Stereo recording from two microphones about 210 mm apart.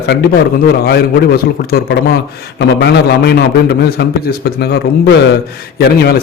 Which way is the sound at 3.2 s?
50° left (ahead or behind).